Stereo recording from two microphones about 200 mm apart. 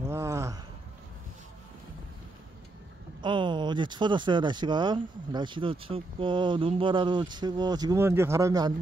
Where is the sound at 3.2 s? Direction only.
25° right (ahead or behind).